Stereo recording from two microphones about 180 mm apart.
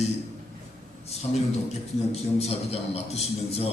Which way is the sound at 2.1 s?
35° left (ahead or behind).